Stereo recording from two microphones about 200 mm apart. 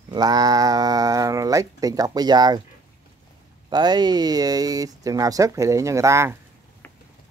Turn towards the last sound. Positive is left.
turn(degrees=-15)  # may be behind; listen again after turning